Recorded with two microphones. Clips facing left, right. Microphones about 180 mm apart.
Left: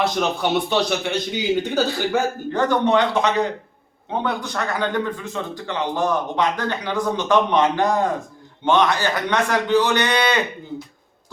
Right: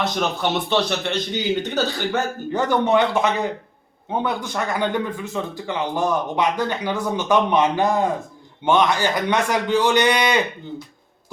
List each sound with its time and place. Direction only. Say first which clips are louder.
0.0 s a man's voice: left 1 dB; 10° left (ahead or behind)
2.5 s a man's voice: even; 10° right (ahead or behind)